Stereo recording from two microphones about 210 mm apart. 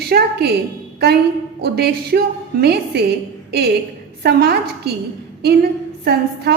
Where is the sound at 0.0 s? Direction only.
50° right (ahead or behind).